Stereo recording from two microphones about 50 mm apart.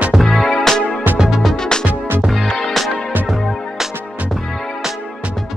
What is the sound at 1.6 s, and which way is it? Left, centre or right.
Music, centre.